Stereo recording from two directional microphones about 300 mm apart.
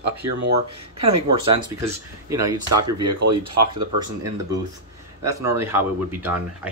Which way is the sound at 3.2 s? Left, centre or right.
Right.